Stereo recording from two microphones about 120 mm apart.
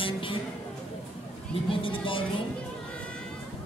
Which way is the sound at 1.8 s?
45° left (ahead or behind).